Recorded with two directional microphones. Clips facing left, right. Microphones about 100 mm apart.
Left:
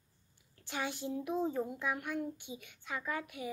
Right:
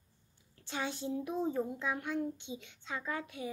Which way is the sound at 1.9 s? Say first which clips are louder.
Right 1 dB; 20° right (ahead or behind).